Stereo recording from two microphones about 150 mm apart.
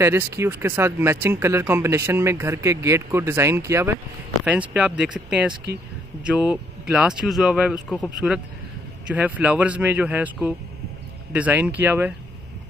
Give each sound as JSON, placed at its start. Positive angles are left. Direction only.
{"t": 0.0, "sound": "speech", "side_deg": -15}
{"t": 6.2, "sound": "speech", "side_deg": -5}